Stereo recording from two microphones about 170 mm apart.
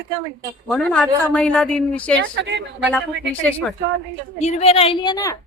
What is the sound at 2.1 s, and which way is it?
Speech, 90° right.